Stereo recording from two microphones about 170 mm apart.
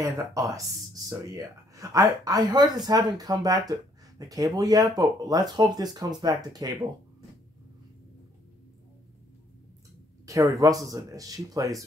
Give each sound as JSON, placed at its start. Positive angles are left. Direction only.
{"t": 0.0, "sound": "speech", "side_deg": -20}
{"t": 10.2, "sound": "speech", "side_deg": -20}